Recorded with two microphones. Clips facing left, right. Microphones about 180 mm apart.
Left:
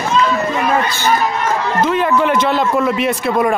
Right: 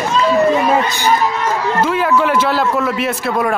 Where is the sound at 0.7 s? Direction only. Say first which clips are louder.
Right 1 dB; 15° right (ahead or behind).